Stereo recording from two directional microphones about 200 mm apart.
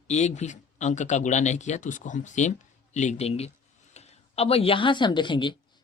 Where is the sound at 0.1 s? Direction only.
35° left (ahead or behind).